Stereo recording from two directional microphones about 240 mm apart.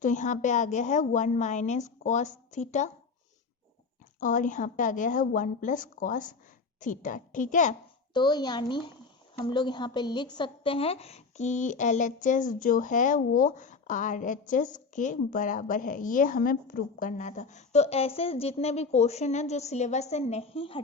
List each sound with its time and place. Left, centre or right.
0.0 s a woman's voice: left
4.2 s a woman's voice: left
8.1 s a woman's voice: centre